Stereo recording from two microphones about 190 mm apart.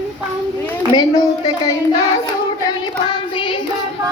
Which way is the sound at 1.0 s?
20° left (ahead or behind).